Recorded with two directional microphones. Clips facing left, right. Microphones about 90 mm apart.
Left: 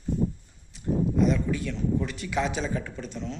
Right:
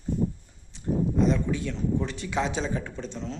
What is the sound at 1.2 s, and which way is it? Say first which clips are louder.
A man's voice: right 1 dB; 30° right (ahead or behind).